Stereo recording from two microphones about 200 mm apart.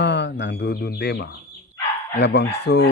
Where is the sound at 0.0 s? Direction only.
60° left (ahead or behind).